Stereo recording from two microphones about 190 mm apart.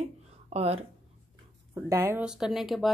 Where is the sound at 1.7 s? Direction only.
15° right (ahead or behind).